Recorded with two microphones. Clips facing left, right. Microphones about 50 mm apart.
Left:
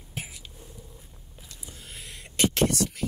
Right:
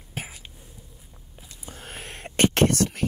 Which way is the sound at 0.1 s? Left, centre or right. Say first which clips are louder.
Right 3 dB; right.